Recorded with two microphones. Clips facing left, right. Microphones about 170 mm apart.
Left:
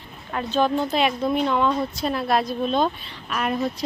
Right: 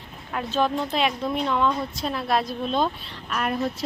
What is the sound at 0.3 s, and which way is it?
A woman's voice, centre (ahead or behind).